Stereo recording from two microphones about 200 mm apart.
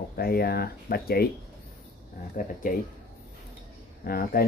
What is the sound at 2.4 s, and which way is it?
Speech, 40° left (ahead or behind).